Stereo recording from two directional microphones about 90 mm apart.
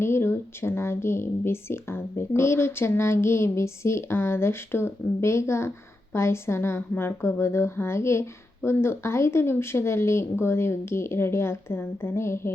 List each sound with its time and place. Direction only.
0.0 s a woman's voice: 30° left (ahead or behind)